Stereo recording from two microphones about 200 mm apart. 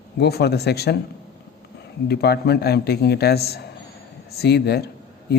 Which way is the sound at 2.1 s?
55° left (ahead or behind).